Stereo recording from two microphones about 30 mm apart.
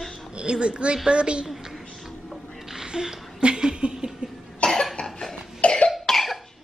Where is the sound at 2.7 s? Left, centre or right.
Centre.